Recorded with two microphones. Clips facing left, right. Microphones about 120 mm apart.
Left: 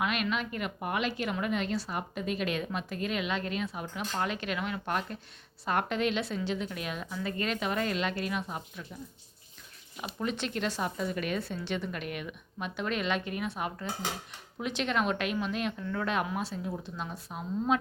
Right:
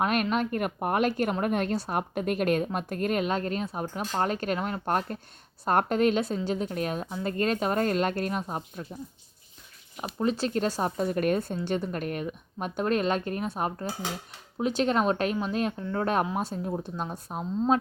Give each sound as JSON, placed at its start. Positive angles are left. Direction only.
{"t": 0.0, "sound": "speech", "side_deg": -45}
{"t": 10.2, "sound": "a woman's voice", "side_deg": -35}